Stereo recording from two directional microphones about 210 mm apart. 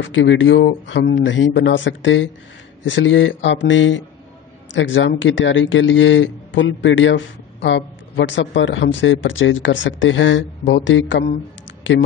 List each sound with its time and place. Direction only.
0.0 s speech: 60° left (ahead or behind)